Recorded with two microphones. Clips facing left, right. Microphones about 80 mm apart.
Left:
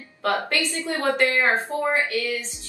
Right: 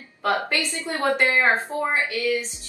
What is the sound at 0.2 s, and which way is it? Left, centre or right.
A woman's voice, centre.